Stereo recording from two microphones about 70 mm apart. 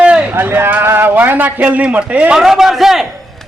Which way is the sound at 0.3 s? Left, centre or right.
Right.